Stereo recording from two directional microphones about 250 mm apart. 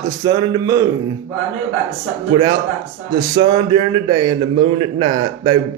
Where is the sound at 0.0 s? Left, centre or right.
Centre.